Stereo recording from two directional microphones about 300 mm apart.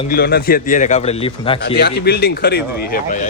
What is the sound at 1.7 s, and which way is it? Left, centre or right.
Speech, left.